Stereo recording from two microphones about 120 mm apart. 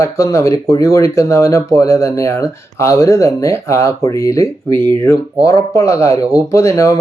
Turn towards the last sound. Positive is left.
turn(degrees=25)  # may be behind; listen again after turning